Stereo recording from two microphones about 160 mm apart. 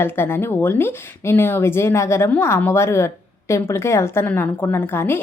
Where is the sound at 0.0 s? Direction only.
15° left (ahead or behind).